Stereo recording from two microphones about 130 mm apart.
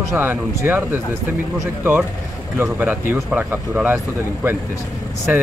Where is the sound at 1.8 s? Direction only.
15° right (ahead or behind).